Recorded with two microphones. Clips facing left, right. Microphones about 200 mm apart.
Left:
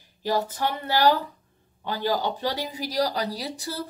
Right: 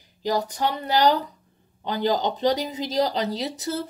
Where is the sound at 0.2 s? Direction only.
15° right (ahead or behind).